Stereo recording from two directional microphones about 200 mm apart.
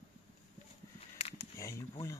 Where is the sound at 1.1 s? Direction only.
30° left (ahead or behind).